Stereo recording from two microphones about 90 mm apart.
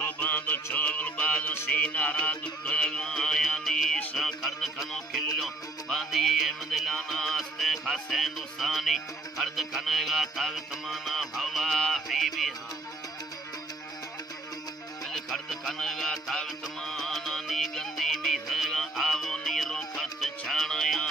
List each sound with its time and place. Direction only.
0.0 s music: 20° left (ahead or behind); by 4.0 s 5° left (ahead or behind)
4.2 s a sound: 5° left (ahead or behind)
4.9 s music: 5° left (ahead or behind)
15.0 s music: 5° left (ahead or behind)